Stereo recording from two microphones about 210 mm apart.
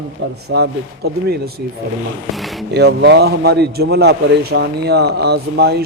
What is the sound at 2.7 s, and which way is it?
A man's voice, 55° right (ahead or behind).